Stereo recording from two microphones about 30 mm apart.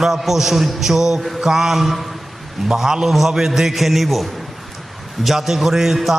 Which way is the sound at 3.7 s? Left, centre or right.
Centre.